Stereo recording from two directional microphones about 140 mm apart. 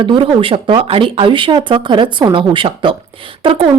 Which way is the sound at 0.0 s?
35° right (ahead or behind).